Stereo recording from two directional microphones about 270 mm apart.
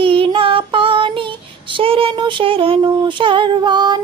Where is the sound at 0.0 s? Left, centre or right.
Centre.